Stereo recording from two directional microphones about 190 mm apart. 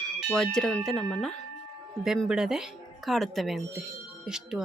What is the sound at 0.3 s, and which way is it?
Speech, 5° left (ahead or behind).